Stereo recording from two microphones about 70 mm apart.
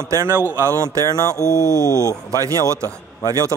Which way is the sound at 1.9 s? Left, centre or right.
Left.